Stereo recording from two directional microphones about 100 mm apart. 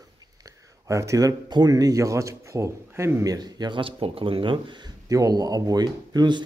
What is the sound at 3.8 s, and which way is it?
Speech, 65° right (ahead or behind).